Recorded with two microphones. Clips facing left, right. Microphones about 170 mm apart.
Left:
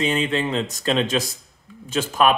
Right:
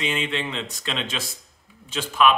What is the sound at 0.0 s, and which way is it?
Speech, 40° left (ahead or behind).